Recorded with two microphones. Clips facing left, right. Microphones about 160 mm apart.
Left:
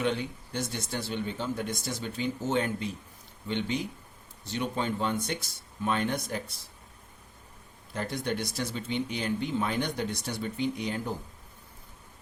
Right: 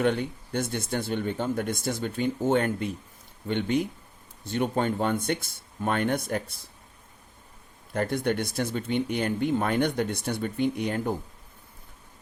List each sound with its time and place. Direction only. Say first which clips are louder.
0.0 s speech: right 4 dB; 55° right (ahead or behind)
7.9 s speech: right 6 dB; 55° right (ahead or behind)